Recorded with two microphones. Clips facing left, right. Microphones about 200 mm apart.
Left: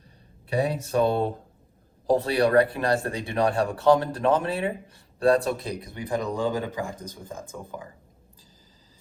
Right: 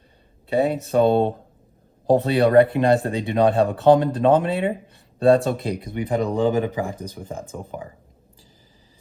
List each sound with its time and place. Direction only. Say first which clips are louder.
0.5 s speech: right 5 dB; 25° right (ahead or behind)